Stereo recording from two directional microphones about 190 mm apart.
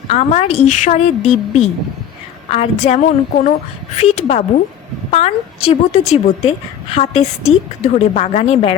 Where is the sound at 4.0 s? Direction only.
35° left (ahead or behind).